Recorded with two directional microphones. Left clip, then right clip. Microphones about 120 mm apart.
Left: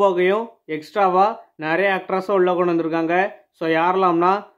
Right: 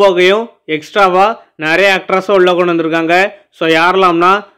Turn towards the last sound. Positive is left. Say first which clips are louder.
# right 8 dB
turn(degrees=-20)  # may be behind; listen again after turning